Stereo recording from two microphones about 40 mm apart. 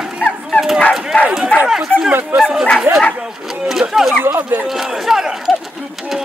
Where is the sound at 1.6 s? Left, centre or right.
Centre.